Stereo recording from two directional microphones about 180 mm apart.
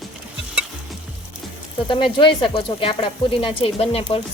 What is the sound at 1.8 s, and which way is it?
A woman's voice, 25° left (ahead or behind).